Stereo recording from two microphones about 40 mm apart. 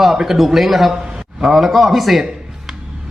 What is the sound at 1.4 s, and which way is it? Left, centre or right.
Speech, centre.